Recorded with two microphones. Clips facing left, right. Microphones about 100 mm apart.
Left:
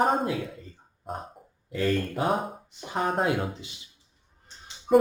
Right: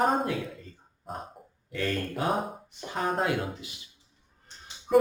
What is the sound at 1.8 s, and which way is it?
Speech, 10° left (ahead or behind).